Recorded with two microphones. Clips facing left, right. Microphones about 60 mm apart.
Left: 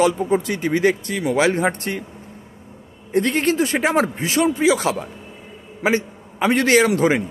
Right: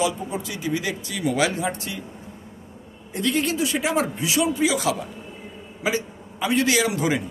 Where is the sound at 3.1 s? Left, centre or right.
Left.